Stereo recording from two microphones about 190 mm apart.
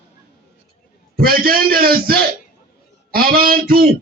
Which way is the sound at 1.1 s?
50° right (ahead or behind).